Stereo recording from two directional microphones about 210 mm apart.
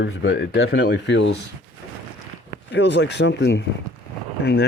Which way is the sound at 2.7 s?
55° left (ahead or behind).